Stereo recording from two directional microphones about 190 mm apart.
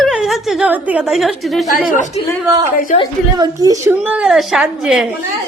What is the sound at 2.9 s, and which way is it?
Speech, 40° left (ahead or behind).